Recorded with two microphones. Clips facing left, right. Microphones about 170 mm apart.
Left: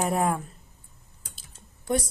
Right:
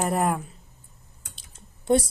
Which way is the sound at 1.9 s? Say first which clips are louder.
Right 6 dB; 25° right (ahead or behind).